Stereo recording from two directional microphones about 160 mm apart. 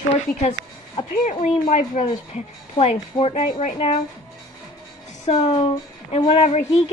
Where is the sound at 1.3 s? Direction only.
40° left (ahead or behind).